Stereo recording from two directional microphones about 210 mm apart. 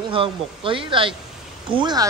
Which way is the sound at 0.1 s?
25° right (ahead or behind).